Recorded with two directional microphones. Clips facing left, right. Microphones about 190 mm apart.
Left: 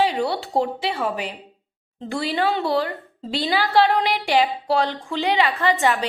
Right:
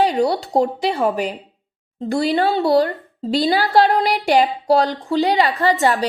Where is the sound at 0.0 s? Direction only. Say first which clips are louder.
Right 4 dB; 40° right (ahead or behind).